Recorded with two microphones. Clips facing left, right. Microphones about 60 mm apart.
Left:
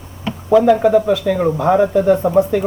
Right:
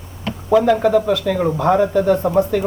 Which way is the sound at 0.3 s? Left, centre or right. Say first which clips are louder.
Left 3 dB; centre.